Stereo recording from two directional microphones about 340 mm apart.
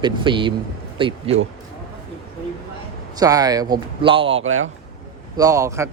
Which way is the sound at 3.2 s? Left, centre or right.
Centre.